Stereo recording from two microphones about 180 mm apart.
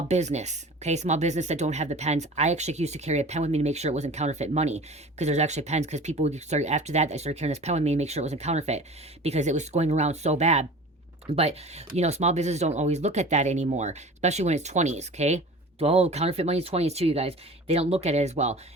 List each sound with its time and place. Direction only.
0.1 s speech: 40° right (ahead or behind)